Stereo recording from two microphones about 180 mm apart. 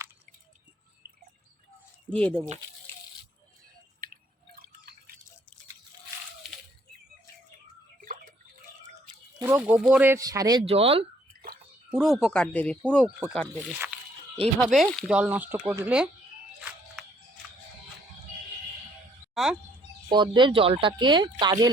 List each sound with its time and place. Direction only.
2.0 s speech: 5° left (ahead or behind)
4.0 s drip: 55° right (ahead or behind)
8.0 s a sound: 50° right (ahead or behind)
9.4 s speech: 10° right (ahead or behind)
10.7 s speech: 35° right (ahead or behind)
11.9 s speech: centre (ahead or behind)
16.6 s a sound: centre (ahead or behind)
19.3 s a sound: centre (ahead or behind)
20.1 s speech: 25° right (ahead or behind)